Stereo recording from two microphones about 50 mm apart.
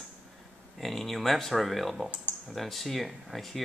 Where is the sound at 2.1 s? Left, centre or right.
Right.